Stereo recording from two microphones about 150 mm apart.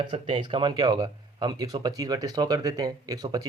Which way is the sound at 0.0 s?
30° right (ahead or behind).